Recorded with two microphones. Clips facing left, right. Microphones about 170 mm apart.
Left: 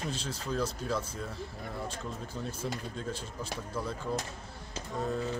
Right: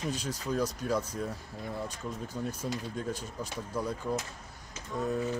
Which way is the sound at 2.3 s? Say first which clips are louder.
Right 2 dB; 10° right (ahead or behind).